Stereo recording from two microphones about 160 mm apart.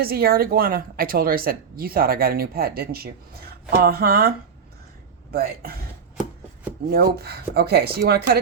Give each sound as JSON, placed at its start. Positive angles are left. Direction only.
{"t": 0.0, "sound": "speech", "side_deg": -70}
{"t": 6.9, "sound": "speech", "side_deg": -75}